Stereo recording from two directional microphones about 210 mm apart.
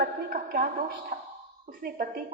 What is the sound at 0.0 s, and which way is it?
A woman's voice, 45° right (ahead or behind).